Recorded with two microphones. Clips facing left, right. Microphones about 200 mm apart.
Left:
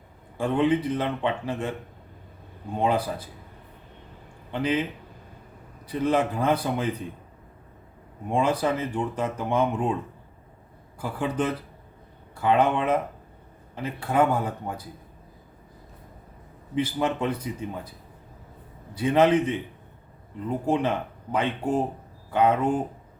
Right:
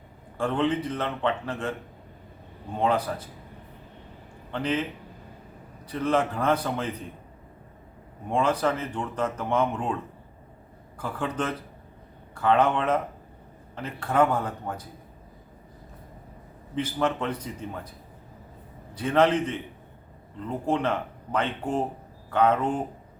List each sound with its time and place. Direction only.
0.3 s speech: 10° left (ahead or behind)
2.7 s speech: 10° left (ahead or behind)
4.5 s speech: 10° left (ahead or behind)
5.9 s speech: 10° left (ahead or behind)
8.3 s speech: 10° left (ahead or behind)
16.7 s speech: 10° left (ahead or behind)
18.9 s speech: 10° left (ahead or behind)